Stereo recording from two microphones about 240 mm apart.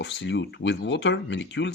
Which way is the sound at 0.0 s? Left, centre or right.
Left.